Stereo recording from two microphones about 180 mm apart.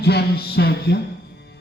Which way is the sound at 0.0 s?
65° left (ahead or behind).